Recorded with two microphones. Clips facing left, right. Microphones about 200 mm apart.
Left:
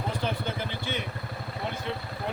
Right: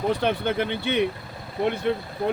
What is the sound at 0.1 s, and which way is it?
Speech, 65° right (ahead or behind).